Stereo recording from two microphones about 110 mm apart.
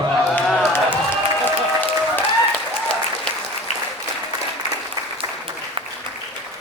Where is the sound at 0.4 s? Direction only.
Centre (ahead or behind).